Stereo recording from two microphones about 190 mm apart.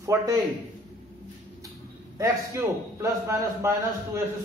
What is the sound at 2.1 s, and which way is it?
A man's voice, 15° right (ahead or behind).